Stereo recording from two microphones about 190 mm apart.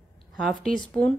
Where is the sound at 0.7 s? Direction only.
5° left (ahead or behind).